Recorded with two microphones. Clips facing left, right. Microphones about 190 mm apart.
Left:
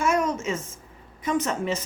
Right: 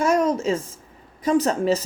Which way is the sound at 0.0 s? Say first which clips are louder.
Right 4 dB; 35° right (ahead or behind).